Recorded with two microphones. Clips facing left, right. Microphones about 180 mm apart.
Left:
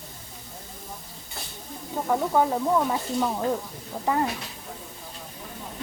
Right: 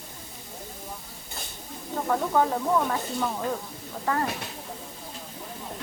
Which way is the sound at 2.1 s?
15° left (ahead or behind).